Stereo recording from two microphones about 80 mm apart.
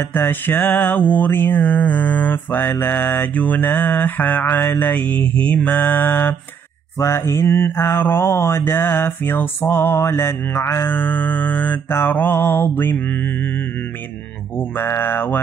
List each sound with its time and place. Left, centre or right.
0.0 s mantra: left
7.0 s mantra: left
14.6 s mantra: left